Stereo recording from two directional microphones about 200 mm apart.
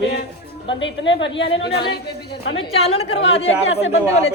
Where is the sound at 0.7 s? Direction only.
65° left (ahead or behind).